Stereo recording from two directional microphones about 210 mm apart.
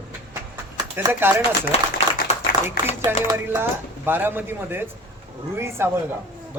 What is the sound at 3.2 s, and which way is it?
Speech, 15° right (ahead or behind).